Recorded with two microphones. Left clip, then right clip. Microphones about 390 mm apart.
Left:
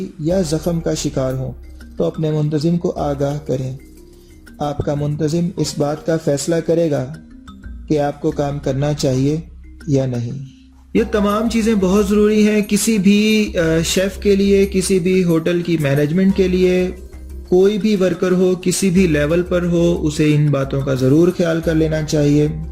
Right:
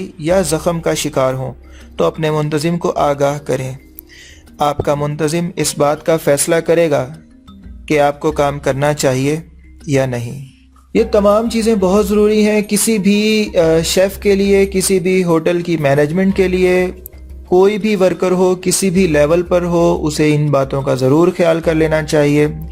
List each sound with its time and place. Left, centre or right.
0.3 s speech: right
2.0 s speech: right
5.2 s a man's voice: centre